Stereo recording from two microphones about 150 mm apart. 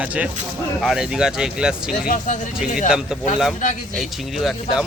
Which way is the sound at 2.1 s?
55° left (ahead or behind).